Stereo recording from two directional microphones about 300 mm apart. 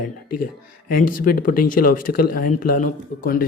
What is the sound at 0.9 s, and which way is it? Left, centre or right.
Speech, left.